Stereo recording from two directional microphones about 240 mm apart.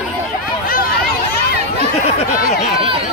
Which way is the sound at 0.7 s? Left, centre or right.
Left.